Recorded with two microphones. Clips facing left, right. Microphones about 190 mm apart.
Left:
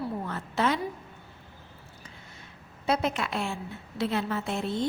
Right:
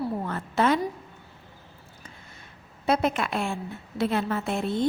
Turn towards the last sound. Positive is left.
turn(degrees=-50)  # may be behind; listen again after turning